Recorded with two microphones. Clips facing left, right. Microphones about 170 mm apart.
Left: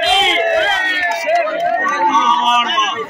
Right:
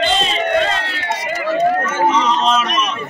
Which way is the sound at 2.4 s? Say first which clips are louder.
Even; 15° left (ahead or behind).